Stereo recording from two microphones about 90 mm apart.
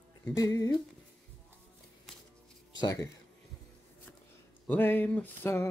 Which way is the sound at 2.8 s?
40° left (ahead or behind).